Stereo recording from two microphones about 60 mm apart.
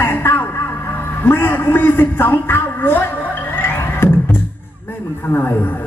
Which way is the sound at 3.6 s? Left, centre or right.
Left.